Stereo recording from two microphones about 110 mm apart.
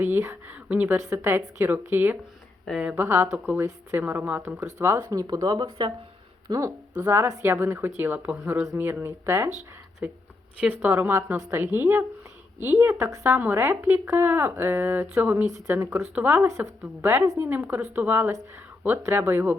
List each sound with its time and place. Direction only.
0.0 s a woman's voice: 20° right (ahead or behind)
0.9 s a woman's voice: 25° right (ahead or behind)
4.6 s a woman's voice: 25° right (ahead or behind)
5.0 s a woman's voice: 35° right (ahead or behind); by 16.5 s 15° right (ahead or behind)
16.5 s a woman's voice: 30° right (ahead or behind)